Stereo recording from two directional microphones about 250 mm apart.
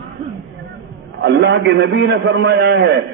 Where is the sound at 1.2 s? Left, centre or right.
Right.